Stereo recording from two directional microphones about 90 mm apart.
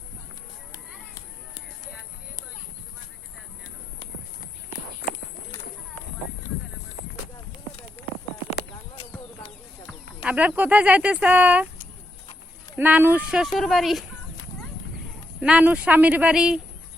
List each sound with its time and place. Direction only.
10.2 s speech: 15° right (ahead or behind)
12.7 s speech: 20° right (ahead or behind)
13.5 s speech: centre (ahead or behind)
15.4 s speech: 15° right (ahead or behind)